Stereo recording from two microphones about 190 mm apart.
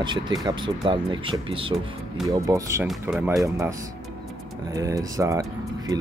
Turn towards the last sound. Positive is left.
turn(degrees=-15)  # may be behind; listen again after turning